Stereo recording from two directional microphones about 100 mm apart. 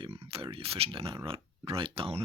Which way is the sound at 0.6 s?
70° right (ahead or behind).